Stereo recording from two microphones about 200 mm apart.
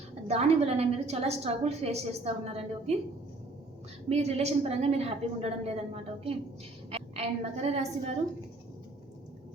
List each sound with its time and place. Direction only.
0.3 s a woman's voice: 30° right (ahead or behind)
4.1 s a woman's voice: 30° right (ahead or behind)